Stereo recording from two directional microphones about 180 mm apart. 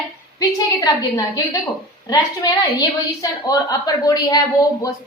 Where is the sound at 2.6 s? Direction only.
20° left (ahead or behind).